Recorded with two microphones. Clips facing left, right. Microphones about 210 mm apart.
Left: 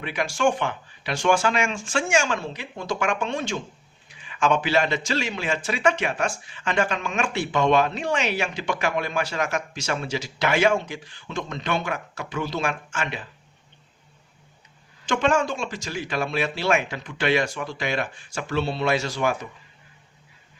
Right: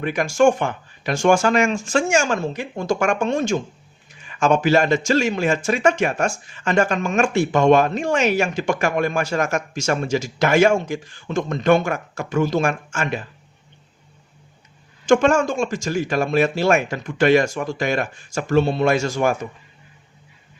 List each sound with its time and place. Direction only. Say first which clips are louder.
0.0 s speech: right 7 dB; 45° right (ahead or behind)
15.0 s speech: right 6 dB; 45° right (ahead or behind)